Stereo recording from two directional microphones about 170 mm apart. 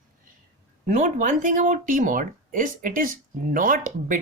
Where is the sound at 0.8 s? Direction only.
45° right (ahead or behind).